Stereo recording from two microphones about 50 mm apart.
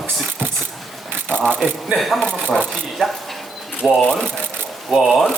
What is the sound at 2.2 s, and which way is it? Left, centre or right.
Speech, centre.